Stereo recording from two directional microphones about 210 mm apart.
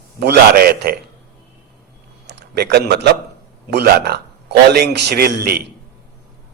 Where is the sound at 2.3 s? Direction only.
50° right (ahead or behind).